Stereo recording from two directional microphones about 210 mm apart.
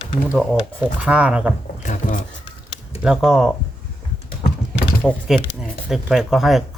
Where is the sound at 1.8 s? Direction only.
35° left (ahead or behind).